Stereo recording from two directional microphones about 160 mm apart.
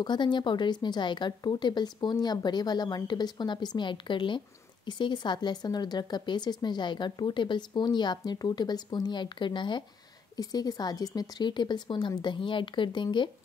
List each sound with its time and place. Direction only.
0.0 s speech: 30° left (ahead or behind)